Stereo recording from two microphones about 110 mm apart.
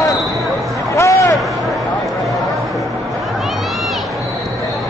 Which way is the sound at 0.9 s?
30° left (ahead or behind).